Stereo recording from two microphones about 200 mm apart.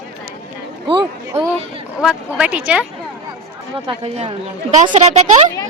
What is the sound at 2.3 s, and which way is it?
Speech, 5° right (ahead or behind).